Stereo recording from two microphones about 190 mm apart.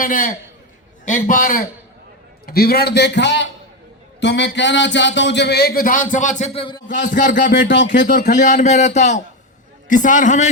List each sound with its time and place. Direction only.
0.0 s a man's voice: 45° left (ahead or behind); by 6.8 s 25° left (ahead or behind)
7.1 s a man's voice: 45° left (ahead or behind)
7.7 s speech: 65° left (ahead or behind); by 10.5 s 40° left (ahead or behind)